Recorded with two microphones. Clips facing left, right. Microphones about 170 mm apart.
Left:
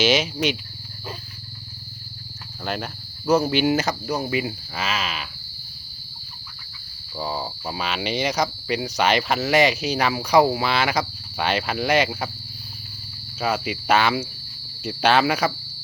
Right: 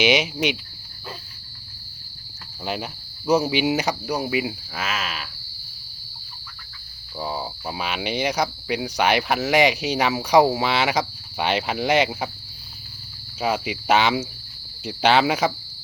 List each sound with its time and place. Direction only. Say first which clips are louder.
0.0 s speech: even; 15° right (ahead or behind)
2.6 s speech: even; 10° right (ahead or behind)
7.2 s speech: even; 5° right (ahead or behind)
13.4 s speech: even; 15° right (ahead or behind)